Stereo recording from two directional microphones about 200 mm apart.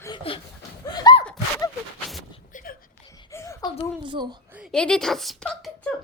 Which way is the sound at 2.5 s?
45° left (ahead or behind).